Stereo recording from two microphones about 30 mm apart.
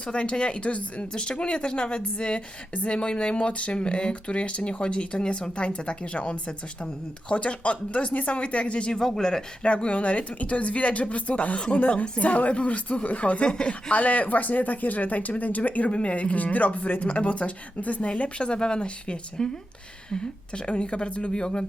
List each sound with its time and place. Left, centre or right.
0.0 s speech: left
1.1 s speech: left
8.9 s speech: centre
9.6 s speech: left
11.8 s speech: left
13.5 s speech: left
13.9 s speech: left
15.9 s speech: left
18.0 s speech: left